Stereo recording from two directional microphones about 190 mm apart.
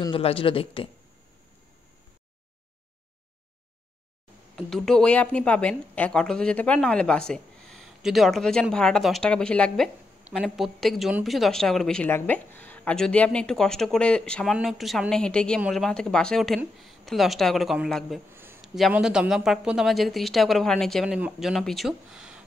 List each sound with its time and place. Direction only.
0.0 s speech: 30° left (ahead or behind)
4.6 s a woman's voice: centre (ahead or behind)
18.3 s a sound: 10° right (ahead or behind)
18.6 s a woman's voice: centre (ahead or behind)